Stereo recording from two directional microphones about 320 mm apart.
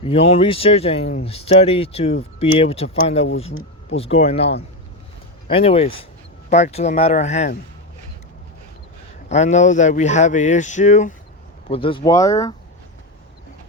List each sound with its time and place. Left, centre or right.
0.0 s speech: centre
9.3 s speech: left